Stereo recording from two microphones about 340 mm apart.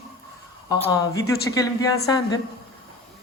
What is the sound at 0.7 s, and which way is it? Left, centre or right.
A woman's voice, centre.